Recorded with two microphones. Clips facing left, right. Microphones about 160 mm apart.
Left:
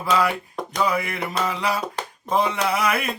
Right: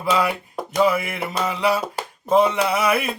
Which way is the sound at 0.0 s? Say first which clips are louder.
Even; 5° right (ahead or behind).